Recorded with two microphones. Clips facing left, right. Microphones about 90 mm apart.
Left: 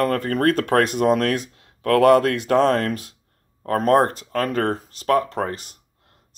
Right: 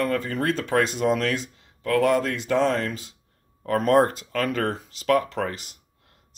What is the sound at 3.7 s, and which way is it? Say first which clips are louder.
Speech: left 2 dB; 40° left (ahead or behind).